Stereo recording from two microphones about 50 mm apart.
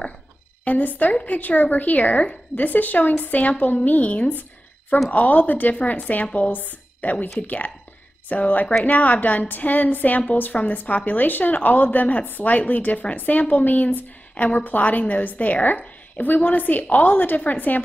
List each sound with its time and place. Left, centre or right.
0.7 s a woman's voice: left